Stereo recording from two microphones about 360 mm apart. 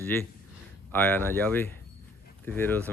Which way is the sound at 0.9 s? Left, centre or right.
Centre.